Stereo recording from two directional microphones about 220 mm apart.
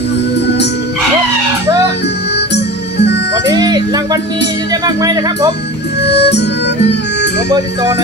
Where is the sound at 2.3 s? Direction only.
50° left (ahead or behind).